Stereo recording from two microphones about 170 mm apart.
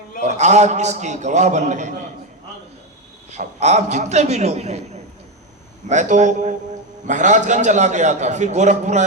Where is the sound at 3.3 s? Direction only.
40° right (ahead or behind).